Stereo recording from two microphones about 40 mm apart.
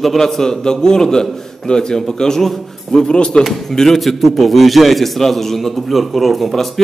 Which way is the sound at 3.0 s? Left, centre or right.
Left.